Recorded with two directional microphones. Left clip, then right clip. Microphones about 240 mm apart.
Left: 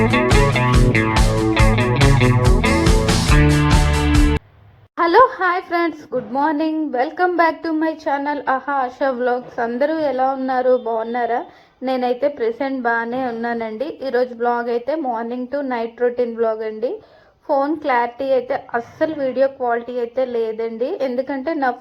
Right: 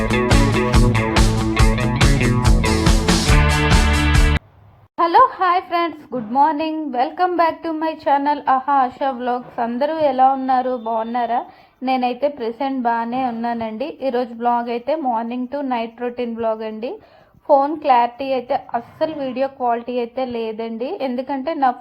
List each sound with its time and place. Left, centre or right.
0.0 s music: centre
5.0 s a sound: left
6.3 s a woman's voice: left
16.4 s a woman's voice: left
18.3 s a woman's voice: left
19.0 s a woman's voice: left
19.4 s a woman's voice: left